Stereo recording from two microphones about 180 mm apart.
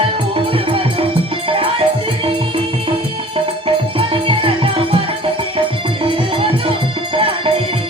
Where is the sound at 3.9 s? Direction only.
30° right (ahead or behind).